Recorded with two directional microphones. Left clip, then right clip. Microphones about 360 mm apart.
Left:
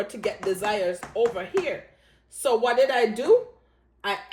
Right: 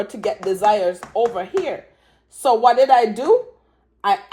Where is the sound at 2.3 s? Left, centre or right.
Centre.